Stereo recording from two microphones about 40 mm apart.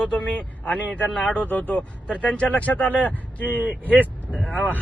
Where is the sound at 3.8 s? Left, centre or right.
Right.